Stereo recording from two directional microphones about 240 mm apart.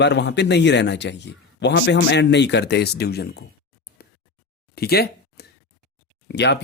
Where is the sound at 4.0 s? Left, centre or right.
Left.